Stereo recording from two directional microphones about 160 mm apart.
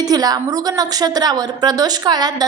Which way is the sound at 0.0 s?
25° right (ahead or behind).